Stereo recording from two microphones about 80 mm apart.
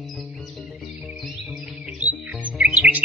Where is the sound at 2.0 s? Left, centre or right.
Centre.